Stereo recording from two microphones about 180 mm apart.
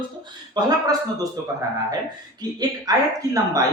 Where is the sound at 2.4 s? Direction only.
20° right (ahead or behind).